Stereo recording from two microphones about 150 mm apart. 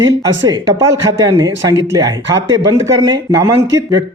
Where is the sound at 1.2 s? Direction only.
25° right (ahead or behind).